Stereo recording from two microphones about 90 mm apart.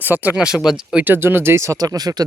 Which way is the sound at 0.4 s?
5° right (ahead or behind).